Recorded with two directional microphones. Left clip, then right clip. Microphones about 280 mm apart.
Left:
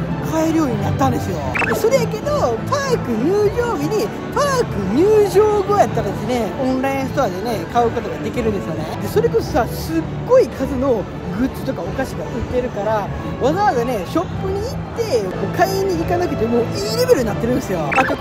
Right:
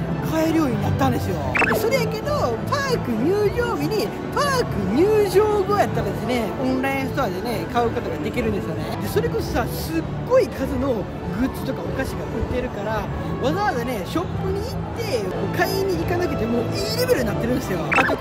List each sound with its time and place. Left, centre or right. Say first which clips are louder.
0.3 s speech: left 3 dB; centre
9.1 s speech: left 7 dB; centre
12.5 s speech: left 8 dB; centre